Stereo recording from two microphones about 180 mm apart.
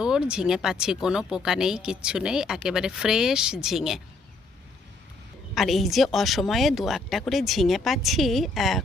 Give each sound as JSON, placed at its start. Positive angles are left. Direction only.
{"t": 0.0, "sound": "speech", "side_deg": -5}
{"t": 5.5, "sound": "speech", "side_deg": 0}